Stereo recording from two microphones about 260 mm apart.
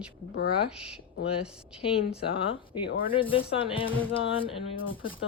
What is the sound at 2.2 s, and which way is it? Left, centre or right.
Speech, left.